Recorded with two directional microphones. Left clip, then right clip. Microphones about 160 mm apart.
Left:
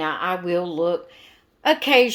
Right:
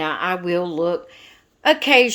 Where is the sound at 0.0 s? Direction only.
35° right (ahead or behind).